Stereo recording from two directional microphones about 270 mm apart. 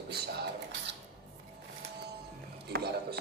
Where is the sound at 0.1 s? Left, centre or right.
Right.